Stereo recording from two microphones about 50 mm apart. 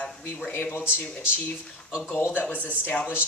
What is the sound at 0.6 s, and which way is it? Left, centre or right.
Speech, left.